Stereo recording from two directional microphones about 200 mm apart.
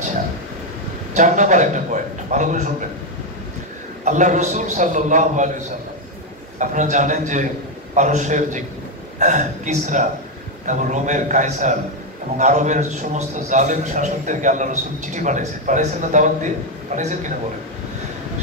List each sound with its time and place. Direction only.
1.1 s a man's voice: 40° right (ahead or behind)
4.0 s a man's voice: 40° right (ahead or behind)
6.6 s a man's voice: 40° right (ahead or behind)